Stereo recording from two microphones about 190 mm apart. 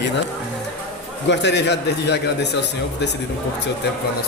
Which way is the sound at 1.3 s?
65° left (ahead or behind).